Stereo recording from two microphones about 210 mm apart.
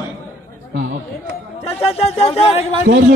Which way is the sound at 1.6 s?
30° left (ahead or behind).